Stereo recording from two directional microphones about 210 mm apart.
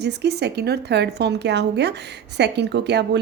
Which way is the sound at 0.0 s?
50° right (ahead or behind).